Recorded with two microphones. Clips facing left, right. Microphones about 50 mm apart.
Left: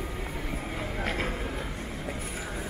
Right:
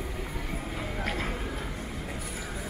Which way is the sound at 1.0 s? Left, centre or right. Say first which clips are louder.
Left 2 dB; left.